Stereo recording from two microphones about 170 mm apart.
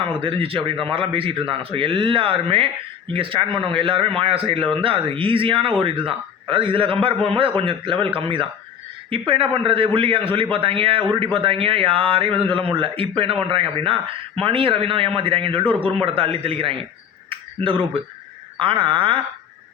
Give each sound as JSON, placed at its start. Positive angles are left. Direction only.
{"t": 0.2, "sound": "a man's voice", "side_deg": -30}
{"t": 17.2, "sound": "a sound", "side_deg": -30}
{"t": 18.6, "sound": "speech", "side_deg": -30}